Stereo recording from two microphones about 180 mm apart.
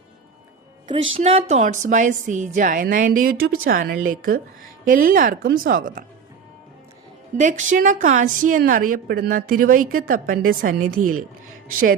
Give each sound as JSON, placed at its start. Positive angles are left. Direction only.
{"t": 1.1, "sound": "a woman's voice", "side_deg": -35}
{"t": 7.3, "sound": "a woman's voice", "side_deg": -45}